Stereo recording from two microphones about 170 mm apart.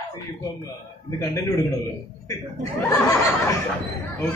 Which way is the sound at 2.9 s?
20° left (ahead or behind).